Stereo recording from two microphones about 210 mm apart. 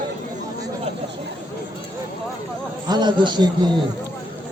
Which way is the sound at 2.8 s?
20° right (ahead or behind).